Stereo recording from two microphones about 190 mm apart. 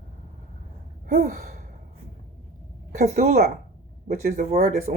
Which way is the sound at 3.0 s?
45° right (ahead or behind).